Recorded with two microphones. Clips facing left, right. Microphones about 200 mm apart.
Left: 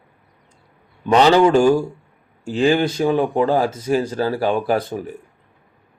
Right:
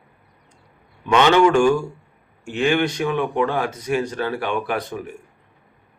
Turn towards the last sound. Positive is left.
turn(degrees=30)  # may be behind; listen again after turning